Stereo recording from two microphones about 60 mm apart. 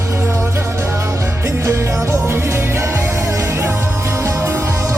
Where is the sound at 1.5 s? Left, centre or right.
Right.